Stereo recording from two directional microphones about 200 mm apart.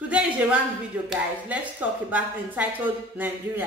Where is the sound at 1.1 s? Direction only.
5° right (ahead or behind).